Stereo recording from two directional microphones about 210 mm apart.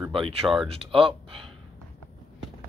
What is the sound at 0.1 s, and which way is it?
Speech, 25° right (ahead or behind).